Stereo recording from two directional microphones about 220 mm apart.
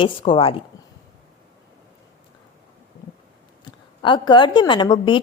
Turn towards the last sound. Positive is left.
turn(degrees=20)  # may be behind; listen again after turning